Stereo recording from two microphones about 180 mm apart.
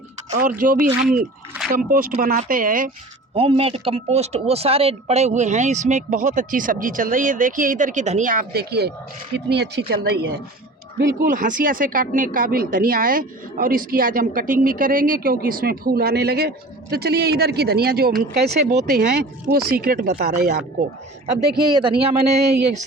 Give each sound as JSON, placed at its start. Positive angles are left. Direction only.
{"t": 0.3, "sound": "speech", "side_deg": -45}
{"t": 1.0, "sound": "a sound", "side_deg": 0}
{"t": 1.9, "sound": "speech", "side_deg": -55}
{"t": 3.3, "sound": "a woman's voice", "side_deg": -30}
{"t": 11.2, "sound": "a woman's voice", "side_deg": -50}
{"t": 21.5, "sound": "speech", "side_deg": -25}